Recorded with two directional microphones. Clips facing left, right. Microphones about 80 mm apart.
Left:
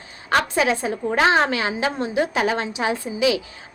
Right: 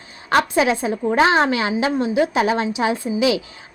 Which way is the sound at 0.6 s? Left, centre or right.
Right.